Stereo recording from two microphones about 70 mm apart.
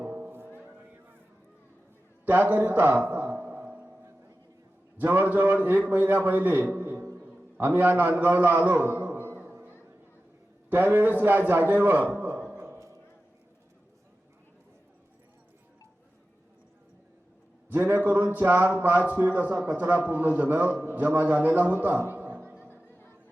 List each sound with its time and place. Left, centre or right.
0.0 s music: right
2.2 s a man's voice: right
4.9 s a man's voice: right
9.4 s a sound: right
10.7 s speech: right
12.1 s a sound: right
17.7 s a man's voice: right